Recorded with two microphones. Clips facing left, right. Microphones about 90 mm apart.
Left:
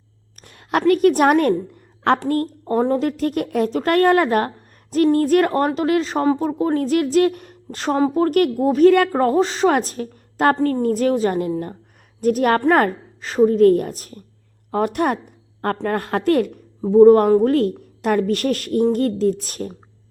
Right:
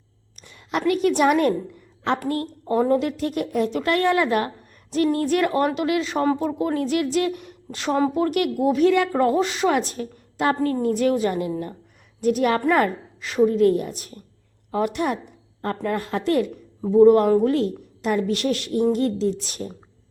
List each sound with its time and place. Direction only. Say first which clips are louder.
0.4 s a woman's voice: left 5 dB; 55° left (ahead or behind)
2.6 s a woman's voice: even; 35° left (ahead or behind); by 16.5 s 50° left (ahead or behind)
16.9 s a woman's voice: left 3 dB; 40° left (ahead or behind)